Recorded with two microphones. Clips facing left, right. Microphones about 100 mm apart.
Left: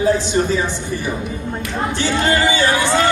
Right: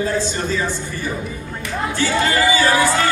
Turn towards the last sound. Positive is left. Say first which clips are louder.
# even
turn(degrees=25)  # may be behind; listen again after turning